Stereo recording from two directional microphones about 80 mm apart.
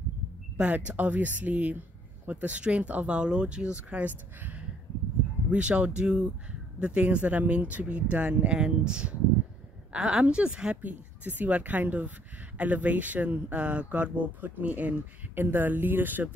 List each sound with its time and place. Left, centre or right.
0.6 s speech: centre